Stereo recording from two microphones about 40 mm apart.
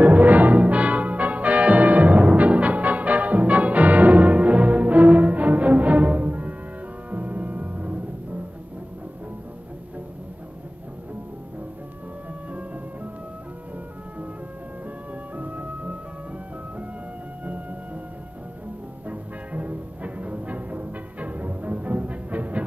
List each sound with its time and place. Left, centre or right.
0.0 s music: right
15.3 s music: right
19.0 s music: right